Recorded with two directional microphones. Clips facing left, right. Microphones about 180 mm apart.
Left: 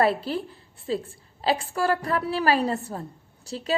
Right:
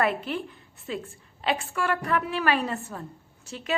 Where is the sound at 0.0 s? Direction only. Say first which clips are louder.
Left 3 dB; 35° left (ahead or behind).